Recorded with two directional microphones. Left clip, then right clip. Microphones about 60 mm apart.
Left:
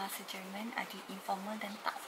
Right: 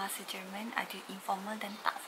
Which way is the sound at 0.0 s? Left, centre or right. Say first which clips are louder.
Right 2 dB; centre.